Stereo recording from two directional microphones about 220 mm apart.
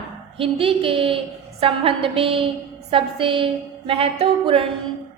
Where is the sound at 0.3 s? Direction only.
25° right (ahead or behind).